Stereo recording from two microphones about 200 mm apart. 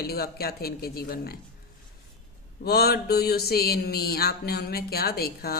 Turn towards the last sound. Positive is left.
turn(degrees=50)  # may be behind; listen again after turning